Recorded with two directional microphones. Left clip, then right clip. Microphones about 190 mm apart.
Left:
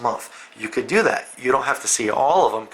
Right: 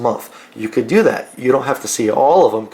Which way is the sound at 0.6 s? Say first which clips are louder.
Right 5 dB; 10° left (ahead or behind).